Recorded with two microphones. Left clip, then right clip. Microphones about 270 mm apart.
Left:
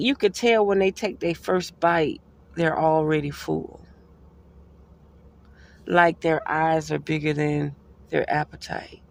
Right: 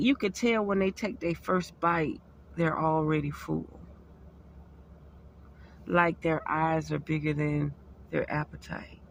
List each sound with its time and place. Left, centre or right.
0.0 s speech: left
5.8 s speech: left